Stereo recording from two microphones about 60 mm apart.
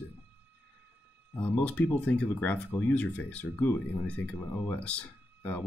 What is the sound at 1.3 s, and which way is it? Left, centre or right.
Speech, left.